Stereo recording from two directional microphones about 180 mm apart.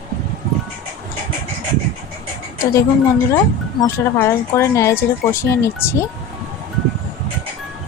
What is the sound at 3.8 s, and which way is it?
Speech, 15° left (ahead or behind).